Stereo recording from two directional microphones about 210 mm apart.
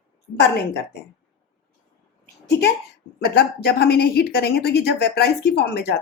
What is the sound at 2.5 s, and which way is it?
A woman's voice, 55° left (ahead or behind).